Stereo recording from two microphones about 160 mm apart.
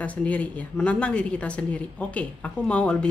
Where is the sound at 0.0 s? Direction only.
10° left (ahead or behind).